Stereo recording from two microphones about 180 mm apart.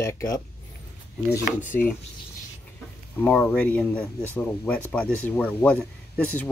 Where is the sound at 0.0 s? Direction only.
20° left (ahead or behind).